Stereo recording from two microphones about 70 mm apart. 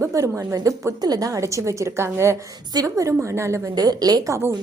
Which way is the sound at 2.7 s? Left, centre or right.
Right.